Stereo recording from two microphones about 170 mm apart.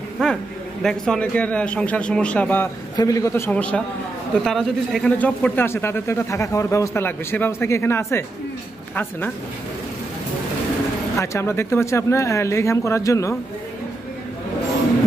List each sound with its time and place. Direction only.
0.2 s a man's voice: 5° left (ahead or behind)
3.0 s speech: 20° left (ahead or behind)
11.1 s speech: 15° left (ahead or behind)